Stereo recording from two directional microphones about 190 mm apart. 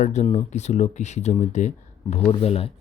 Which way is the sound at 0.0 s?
35° left (ahead or behind).